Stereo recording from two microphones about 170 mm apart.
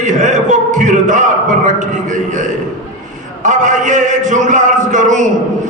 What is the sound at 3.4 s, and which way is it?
A man's voice, 45° right (ahead or behind).